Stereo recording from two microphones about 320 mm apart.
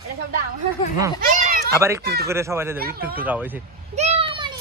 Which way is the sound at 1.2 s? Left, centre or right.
Right.